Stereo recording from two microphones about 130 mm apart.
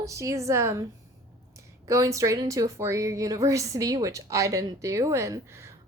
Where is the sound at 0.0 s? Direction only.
25° right (ahead or behind).